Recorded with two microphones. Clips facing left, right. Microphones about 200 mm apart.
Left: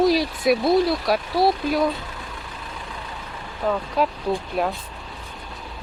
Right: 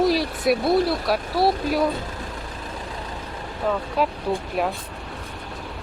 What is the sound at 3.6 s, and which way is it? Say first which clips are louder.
Speech: left 1 dB; centre (ahead or behind).